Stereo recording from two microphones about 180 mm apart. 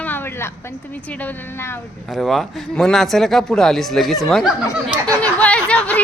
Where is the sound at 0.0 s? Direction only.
10° left (ahead or behind).